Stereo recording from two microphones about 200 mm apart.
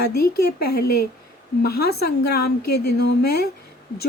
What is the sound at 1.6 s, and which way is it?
Speech, 50° left (ahead or behind).